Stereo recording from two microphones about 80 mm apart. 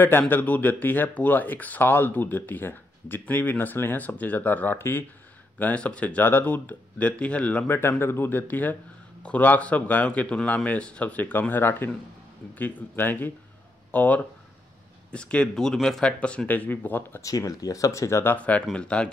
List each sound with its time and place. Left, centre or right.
0.3 s speech: left
8.0 s speech: left
17.2 s speech: left
18.2 s speech: left